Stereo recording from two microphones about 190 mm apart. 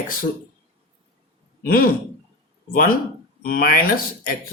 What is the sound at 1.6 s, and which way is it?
A man's voice, 50° left (ahead or behind).